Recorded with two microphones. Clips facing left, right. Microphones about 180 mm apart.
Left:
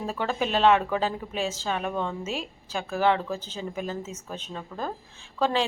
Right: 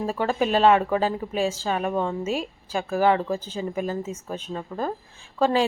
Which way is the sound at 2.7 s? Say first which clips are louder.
Right 3 dB; 5° right (ahead or behind).